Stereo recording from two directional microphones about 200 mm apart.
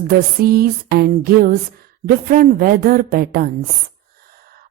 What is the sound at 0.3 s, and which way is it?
Speech, 50° right (ahead or behind).